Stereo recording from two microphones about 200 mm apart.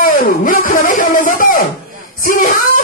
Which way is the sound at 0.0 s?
45° left (ahead or behind).